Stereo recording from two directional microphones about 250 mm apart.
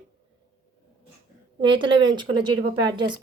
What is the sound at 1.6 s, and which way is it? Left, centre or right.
Speech, centre.